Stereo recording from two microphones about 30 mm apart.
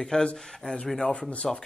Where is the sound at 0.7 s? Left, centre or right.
Left.